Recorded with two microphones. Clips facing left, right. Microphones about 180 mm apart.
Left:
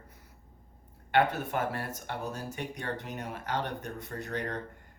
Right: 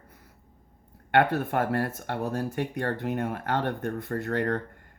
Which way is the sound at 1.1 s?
55° right (ahead or behind).